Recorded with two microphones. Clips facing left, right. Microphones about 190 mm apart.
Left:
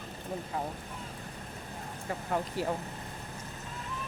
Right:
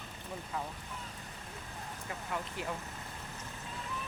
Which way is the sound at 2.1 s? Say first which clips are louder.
Left 7 dB; 40° left (ahead or behind).